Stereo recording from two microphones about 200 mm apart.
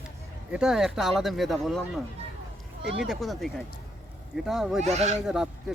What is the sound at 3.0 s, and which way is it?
Speech, centre (ahead or behind).